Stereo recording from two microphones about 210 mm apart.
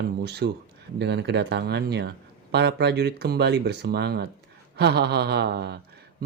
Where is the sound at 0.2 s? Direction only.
50° right (ahead or behind).